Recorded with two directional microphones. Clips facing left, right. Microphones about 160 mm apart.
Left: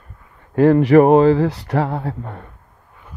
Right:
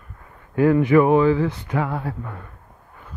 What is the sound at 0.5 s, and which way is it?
Speech, 35° left (ahead or behind).